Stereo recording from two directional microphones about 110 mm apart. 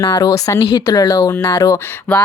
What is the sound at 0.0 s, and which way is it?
Speech, 30° left (ahead or behind).